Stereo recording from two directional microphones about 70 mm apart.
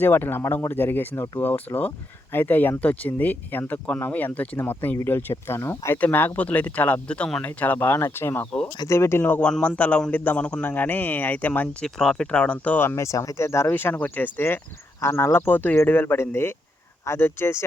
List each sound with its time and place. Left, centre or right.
0.0 s speech: left
6.0 s speech: left
9.2 s speech: left
11.8 s speech: centre
13.0 s speech: left
13.7 s speech: left